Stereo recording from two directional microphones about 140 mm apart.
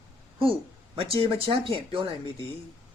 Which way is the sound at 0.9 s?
40° right (ahead or behind).